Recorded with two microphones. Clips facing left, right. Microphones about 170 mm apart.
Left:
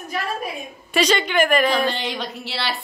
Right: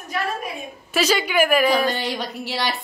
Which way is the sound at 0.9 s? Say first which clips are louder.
Left 1 dB; 5° right (ahead or behind).